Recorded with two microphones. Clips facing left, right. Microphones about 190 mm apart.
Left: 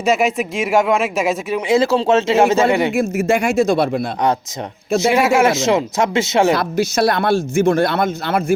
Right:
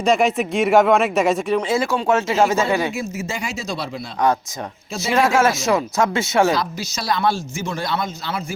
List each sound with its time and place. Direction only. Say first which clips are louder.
0.0 s speech: left 1 dB; 5° left (ahead or behind)
1.6 s speech: left 5 dB; 20° left (ahead or behind)
2.9 s speech: left 10 dB; 55° left (ahead or behind)
5.1 s speech: even; 10° left (ahead or behind)
6.6 s speech: left 10 dB; 55° left (ahead or behind)